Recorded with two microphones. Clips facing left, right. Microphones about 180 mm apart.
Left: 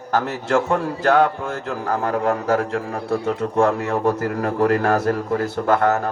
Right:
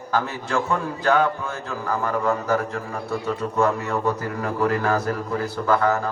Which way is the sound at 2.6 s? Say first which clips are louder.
Left 5 dB; 90° left.